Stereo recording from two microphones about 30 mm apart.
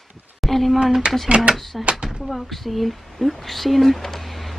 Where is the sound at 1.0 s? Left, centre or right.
Right.